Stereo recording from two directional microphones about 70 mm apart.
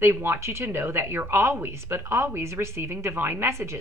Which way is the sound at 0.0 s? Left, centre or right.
Right.